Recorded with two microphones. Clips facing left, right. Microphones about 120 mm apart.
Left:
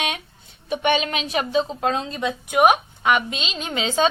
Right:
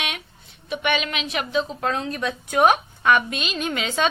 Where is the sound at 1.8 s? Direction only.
20° left (ahead or behind).